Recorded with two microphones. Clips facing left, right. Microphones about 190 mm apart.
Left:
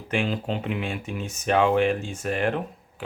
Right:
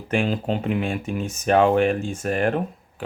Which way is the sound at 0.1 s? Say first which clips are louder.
Right 4 dB; 45° right (ahead or behind).